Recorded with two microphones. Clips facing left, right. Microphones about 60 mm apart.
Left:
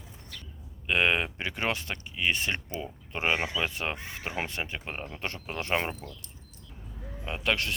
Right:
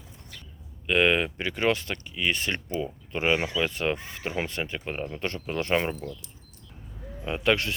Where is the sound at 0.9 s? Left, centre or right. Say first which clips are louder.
Right 3 dB; centre.